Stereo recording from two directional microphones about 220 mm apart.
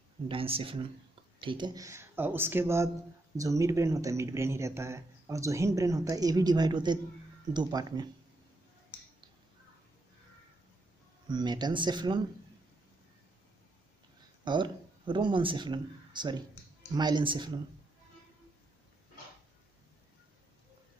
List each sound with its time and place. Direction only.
0.3 s speech: 25° right (ahead or behind)
11.2 s speech: 20° right (ahead or behind)
14.4 s speech: 20° right (ahead or behind)